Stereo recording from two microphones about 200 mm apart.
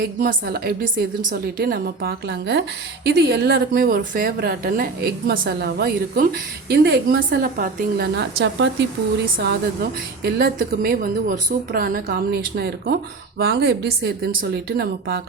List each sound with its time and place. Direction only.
0.0 s a woman's voice: 45° right (ahead or behind); by 7.3 s 60° right (ahead or behind)
7.4 s a woman's voice: 45° right (ahead or behind); by 8.9 s 65° right (ahead or behind)
10.2 s a woman's voice: 50° right (ahead or behind)